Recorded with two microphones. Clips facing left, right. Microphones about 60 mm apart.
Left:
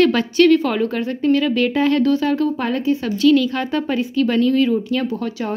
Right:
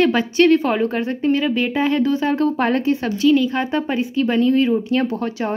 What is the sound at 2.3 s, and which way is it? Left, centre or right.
Speech, right.